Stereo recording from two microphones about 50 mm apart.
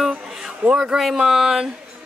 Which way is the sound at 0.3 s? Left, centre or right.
Centre.